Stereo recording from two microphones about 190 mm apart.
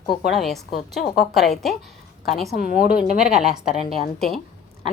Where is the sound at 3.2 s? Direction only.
5° right (ahead or behind).